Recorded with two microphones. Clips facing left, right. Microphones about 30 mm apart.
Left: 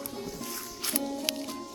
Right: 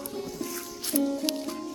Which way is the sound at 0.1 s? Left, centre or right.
Centre.